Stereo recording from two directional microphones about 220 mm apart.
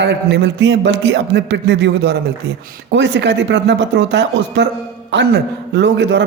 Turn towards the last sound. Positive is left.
turn(degrees=-50)  # may be behind; listen again after turning